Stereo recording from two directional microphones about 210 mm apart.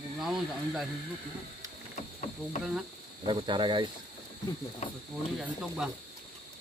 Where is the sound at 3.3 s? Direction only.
25° right (ahead or behind).